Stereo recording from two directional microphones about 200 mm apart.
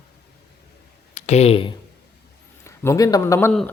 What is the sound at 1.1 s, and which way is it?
Speech, 35° left (ahead or behind).